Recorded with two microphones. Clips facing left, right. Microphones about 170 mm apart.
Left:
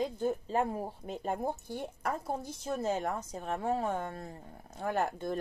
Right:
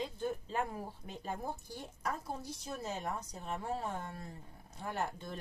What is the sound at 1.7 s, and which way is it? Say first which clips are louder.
A woman's voice: left 5 dB; 55° left (ahead or behind).